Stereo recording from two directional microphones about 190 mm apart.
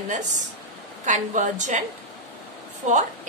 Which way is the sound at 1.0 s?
40° right (ahead or behind).